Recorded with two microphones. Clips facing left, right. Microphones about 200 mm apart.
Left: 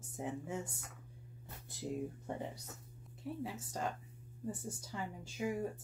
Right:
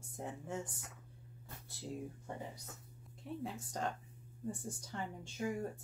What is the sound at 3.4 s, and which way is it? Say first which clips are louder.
Speech: right 1 dB; 5° left (ahead or behind).